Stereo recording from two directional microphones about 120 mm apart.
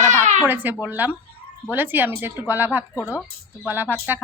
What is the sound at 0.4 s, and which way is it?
Speech, 15° right (ahead or behind).